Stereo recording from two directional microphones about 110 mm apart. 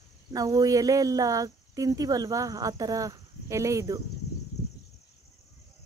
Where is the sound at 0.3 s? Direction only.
35° right (ahead or behind).